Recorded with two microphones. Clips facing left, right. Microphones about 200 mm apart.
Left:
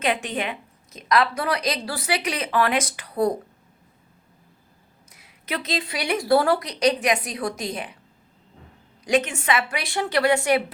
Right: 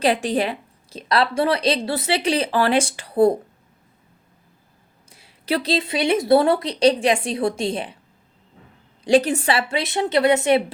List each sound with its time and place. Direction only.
0.0 s a woman's voice: 35° right (ahead or behind)
5.0 s a woman's voice: 30° right (ahead or behind)
9.0 s a woman's voice: 35° right (ahead or behind)